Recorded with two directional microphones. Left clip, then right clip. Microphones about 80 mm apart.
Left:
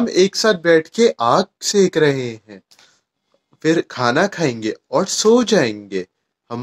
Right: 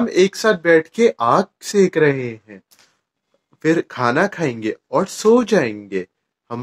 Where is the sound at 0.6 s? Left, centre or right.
Centre.